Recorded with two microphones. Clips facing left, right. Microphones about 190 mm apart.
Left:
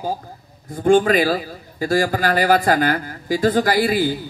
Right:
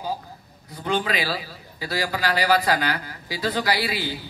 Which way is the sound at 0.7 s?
45° left (ahead or behind).